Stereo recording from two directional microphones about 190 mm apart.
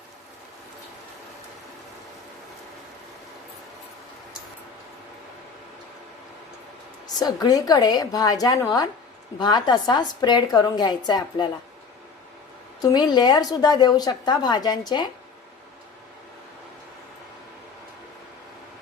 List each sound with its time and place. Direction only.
7.2 s a woman's voice: 20° left (ahead or behind)
12.8 s a woman's voice: 20° left (ahead or behind)